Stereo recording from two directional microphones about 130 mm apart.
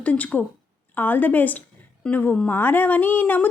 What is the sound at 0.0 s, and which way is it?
A woman's voice, 10° left (ahead or behind).